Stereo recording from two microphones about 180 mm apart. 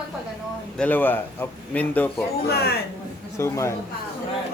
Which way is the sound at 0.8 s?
10° left (ahead or behind).